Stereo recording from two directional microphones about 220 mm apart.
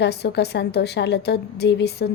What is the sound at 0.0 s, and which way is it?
A woman's voice, 50° left (ahead or behind).